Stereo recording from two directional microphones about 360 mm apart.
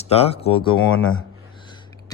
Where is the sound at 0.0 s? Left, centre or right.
Centre.